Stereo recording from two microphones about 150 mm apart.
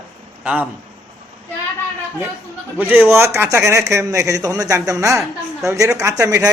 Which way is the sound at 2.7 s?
10° right (ahead or behind).